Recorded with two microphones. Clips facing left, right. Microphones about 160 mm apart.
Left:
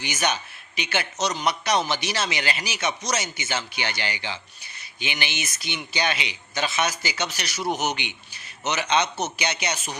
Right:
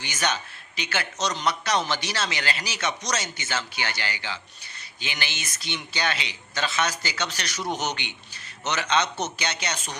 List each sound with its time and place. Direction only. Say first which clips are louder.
0.0 s a man's voice: left 2 dB; 10° left (ahead or behind)